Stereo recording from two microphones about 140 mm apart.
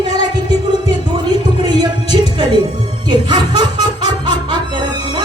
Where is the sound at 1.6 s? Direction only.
30° right (ahead or behind).